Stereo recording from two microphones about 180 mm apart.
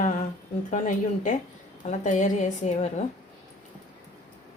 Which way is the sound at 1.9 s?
45° left (ahead or behind).